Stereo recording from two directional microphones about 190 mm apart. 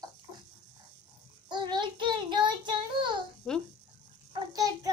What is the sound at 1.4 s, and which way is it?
Child singing, 25° right (ahead or behind).